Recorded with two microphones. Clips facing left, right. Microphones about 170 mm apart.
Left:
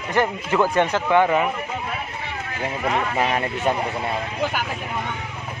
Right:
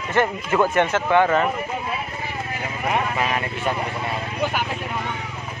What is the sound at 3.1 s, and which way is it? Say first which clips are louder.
Speech: left 2 dB; 35° left (ahead or behind).